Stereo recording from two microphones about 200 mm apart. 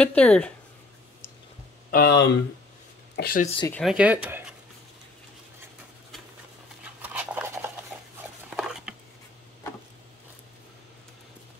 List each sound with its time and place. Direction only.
0.0 s speech: 5° left (ahead or behind)
1.9 s speech: 50° left (ahead or behind)
3.8 s speech: 5° right (ahead or behind)
6.8 s a sound: 5° right (ahead or behind)